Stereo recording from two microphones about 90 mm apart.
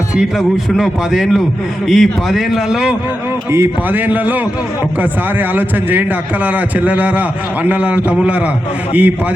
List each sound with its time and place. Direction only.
0.3 s a man's voice: centre (ahead or behind)
3.5 s a man's voice: 25° right (ahead or behind)